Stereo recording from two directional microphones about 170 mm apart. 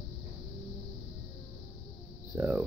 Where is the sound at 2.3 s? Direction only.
15° right (ahead or behind).